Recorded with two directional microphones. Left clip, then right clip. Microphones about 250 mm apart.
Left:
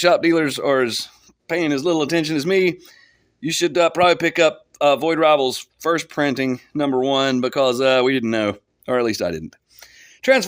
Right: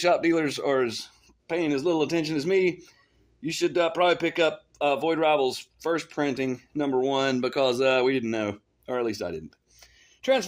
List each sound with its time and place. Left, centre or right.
0.0 s speech: left